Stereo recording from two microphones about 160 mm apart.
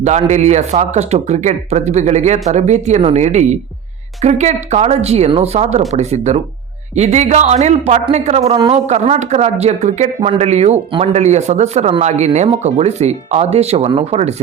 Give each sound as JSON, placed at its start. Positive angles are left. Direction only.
{"t": 0.0, "sound": "speech", "side_deg": -45}